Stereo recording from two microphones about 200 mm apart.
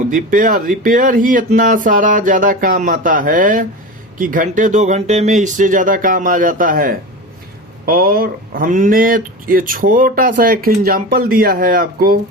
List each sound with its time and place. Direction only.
0.1 s speech: 40° right (ahead or behind)